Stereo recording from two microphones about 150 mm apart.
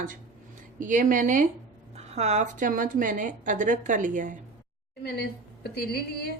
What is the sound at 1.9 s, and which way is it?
A woman's voice, 45° right (ahead or behind).